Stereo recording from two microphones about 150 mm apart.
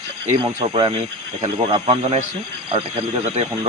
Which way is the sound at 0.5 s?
35° right (ahead or behind).